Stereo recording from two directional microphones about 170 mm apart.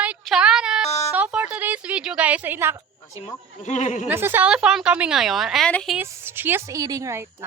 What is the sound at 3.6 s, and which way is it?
Speech, 45° left (ahead or behind).